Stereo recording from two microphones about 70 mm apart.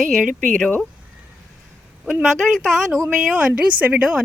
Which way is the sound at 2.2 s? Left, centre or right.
Centre.